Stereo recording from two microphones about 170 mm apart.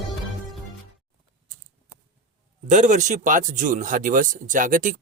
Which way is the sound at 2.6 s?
45° right (ahead or behind).